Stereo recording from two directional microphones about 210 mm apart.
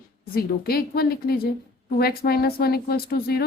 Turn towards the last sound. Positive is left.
turn(degrees=45)  # may be behind; listen again after turning